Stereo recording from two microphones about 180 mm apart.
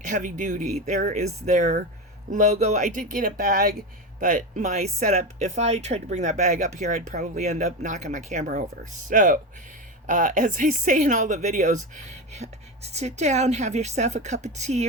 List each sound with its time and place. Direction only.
0.0 s speech: 45° right (ahead or behind)